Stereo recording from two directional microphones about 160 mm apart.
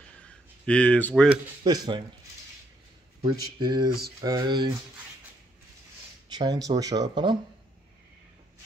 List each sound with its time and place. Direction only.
0.2 s a sound: 10° left (ahead or behind)
1.6 s speech: 25° right (ahead or behind)
3.2 s speech: 30° right (ahead or behind)
6.2 s speech: 25° right (ahead or behind)